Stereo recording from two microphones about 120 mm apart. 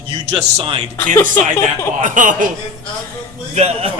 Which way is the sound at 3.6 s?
65° right (ahead or behind).